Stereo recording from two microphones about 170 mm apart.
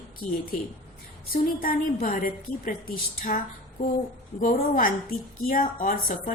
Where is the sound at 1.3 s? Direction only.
55° left (ahead or behind).